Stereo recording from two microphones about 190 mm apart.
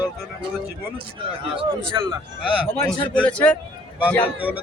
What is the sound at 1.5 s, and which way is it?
Speech, 25° right (ahead or behind).